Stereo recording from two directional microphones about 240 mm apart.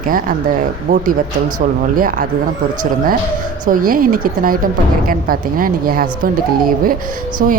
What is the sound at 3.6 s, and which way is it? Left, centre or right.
A woman's voice, right.